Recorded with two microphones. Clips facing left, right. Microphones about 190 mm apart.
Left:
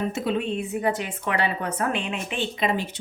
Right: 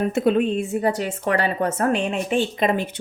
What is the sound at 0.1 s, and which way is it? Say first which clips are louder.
Speech: right 7 dB; 50° right (ahead or behind).